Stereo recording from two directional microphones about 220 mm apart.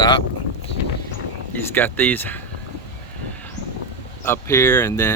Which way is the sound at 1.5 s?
10° left (ahead or behind).